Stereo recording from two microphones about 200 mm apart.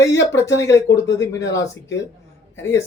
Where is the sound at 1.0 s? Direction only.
60° left (ahead or behind).